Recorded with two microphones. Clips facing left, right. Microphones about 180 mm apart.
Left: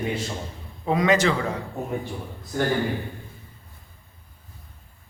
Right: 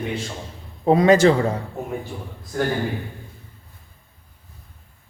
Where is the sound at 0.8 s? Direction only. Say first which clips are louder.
Right 6 dB; 35° right (ahead or behind).